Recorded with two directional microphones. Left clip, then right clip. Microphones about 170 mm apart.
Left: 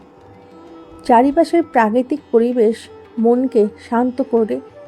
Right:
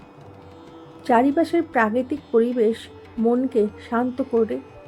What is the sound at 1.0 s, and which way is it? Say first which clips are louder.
A woman's voice: left 6 dB; 30° left (ahead or behind).